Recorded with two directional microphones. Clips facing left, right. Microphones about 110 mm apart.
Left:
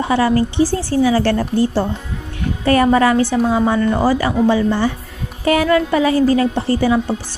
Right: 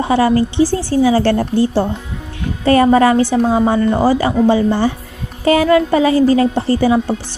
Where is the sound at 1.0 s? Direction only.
30° right (ahead or behind).